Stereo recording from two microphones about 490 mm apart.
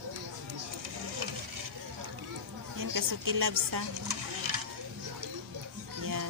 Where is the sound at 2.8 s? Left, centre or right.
Right.